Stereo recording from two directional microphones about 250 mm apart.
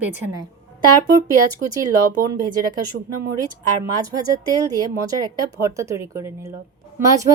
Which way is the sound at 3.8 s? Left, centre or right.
Centre.